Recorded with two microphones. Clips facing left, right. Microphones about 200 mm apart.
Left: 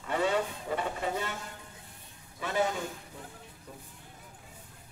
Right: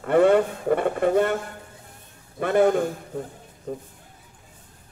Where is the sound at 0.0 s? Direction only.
55° right (ahead or behind).